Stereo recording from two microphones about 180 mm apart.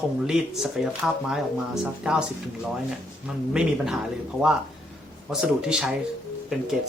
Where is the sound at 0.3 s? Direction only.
5° right (ahead or behind).